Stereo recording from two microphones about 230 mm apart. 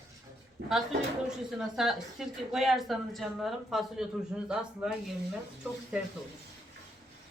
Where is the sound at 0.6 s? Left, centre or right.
Right.